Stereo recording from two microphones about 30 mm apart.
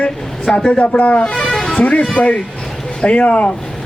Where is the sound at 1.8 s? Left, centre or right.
Left.